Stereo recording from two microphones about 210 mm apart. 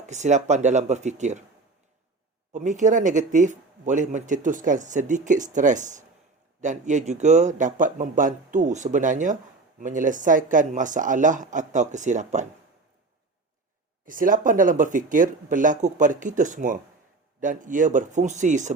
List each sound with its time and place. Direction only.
0.0 s speech: 35° right (ahead or behind)
2.5 s speech: 35° right (ahead or behind)
14.0 s speech: 40° right (ahead or behind)